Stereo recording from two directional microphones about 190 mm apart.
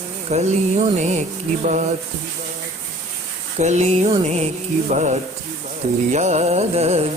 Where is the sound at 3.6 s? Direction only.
35° right (ahead or behind).